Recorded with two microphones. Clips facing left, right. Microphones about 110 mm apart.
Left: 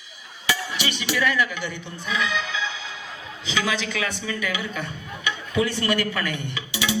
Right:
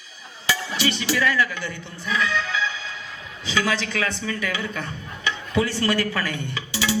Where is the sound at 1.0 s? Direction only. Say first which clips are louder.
Left 1 dB; 20° left (ahead or behind).